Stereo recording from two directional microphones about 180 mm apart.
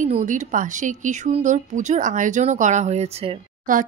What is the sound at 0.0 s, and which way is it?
Speech, 40° right (ahead or behind).